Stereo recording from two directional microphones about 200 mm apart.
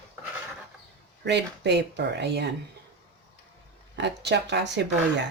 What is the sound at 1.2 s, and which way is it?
Speech, 60° right (ahead or behind).